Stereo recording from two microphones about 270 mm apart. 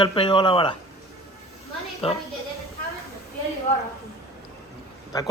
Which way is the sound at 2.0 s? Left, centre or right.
Left.